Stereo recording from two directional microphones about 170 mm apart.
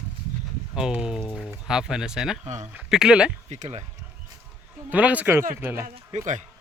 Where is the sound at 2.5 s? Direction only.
45° right (ahead or behind).